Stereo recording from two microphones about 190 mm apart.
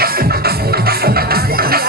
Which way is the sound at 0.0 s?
55° right (ahead or behind).